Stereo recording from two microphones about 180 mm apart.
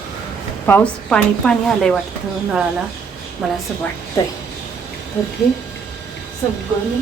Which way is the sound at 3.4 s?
Centre (ahead or behind).